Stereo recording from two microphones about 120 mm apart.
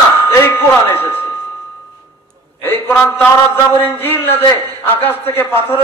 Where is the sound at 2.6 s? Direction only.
15° left (ahead or behind).